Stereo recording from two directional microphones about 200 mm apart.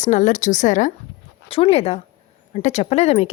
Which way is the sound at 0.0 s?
35° left (ahead or behind).